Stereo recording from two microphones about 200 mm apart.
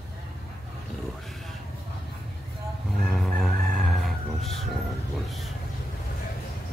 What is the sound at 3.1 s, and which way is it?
Crowing, 5° left (ahead or behind).